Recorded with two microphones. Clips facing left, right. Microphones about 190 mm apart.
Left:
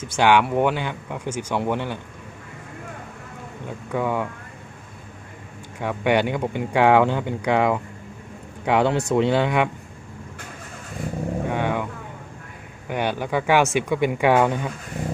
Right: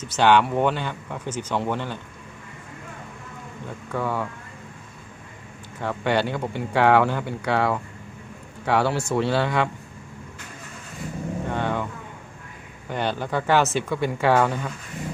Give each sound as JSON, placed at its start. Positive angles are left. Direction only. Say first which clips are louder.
{"t": 0.0, "sound": "speech", "louder": "even", "side_deg": 10}
{"t": 3.9, "sound": "speech", "louder": "left 3 dB", "side_deg": 15}
{"t": 5.8, "sound": "speech", "louder": "left 3 dB", "side_deg": 15}
{"t": 11.4, "sound": "vehicle", "louder": "left 1 dB", "side_deg": 10}
{"t": 12.9, "sound": "speech", "louder": "left 2 dB", "side_deg": 10}